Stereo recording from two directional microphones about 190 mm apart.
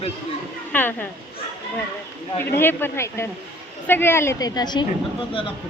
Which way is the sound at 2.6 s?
10° left (ahead or behind).